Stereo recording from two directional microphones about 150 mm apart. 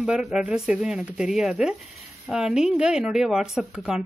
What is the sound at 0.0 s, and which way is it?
A woman's voice, 5° right (ahead or behind).